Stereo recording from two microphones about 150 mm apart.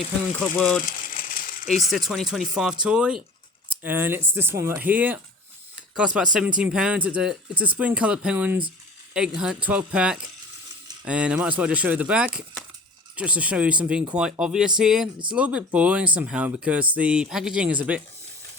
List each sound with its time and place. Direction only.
0.3 s speech: 5° left (ahead or behind)
0.9 s ratchet: 65° left (ahead or behind)
1.9 s speech: centre (ahead or behind)